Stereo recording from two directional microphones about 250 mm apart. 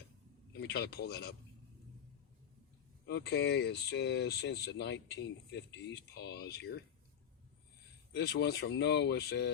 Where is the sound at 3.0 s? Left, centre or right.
Left.